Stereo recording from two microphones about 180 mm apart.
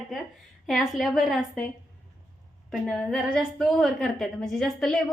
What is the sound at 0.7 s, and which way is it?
Speech, centre (ahead or behind).